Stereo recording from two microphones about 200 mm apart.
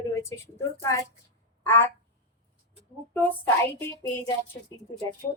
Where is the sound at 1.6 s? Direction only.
10° left (ahead or behind).